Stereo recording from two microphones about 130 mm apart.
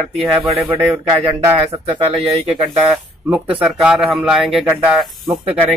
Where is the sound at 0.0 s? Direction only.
Centre (ahead or behind).